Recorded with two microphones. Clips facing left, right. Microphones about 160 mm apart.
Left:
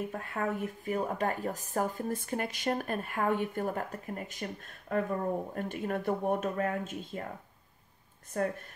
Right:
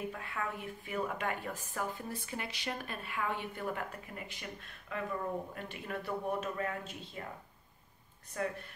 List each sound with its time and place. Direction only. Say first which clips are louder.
0.1 s speech: left 6 dB; 45° left (ahead or behind)
8.3 s speech: left 5 dB; 50° left (ahead or behind)